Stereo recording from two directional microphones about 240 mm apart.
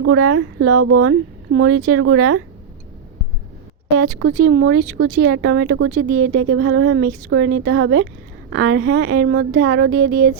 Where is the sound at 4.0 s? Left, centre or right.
Right.